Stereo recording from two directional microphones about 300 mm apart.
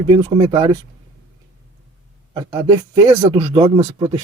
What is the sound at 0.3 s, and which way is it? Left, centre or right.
Speech, centre.